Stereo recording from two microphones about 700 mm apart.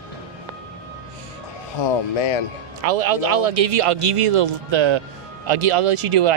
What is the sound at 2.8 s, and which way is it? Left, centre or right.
Speech, right.